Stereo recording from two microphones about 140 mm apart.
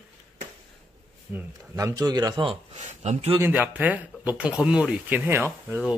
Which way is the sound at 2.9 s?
50° right (ahead or behind).